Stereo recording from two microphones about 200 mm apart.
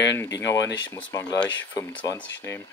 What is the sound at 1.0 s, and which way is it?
Speech, 15° left (ahead or behind).